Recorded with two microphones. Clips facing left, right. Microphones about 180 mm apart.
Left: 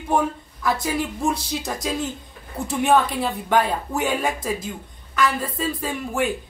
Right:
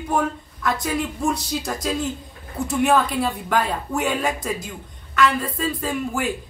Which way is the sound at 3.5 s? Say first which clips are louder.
Left 2 dB; 25° left (ahead or behind).